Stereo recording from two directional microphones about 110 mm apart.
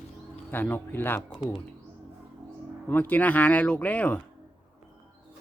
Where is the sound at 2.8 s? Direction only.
15° left (ahead or behind).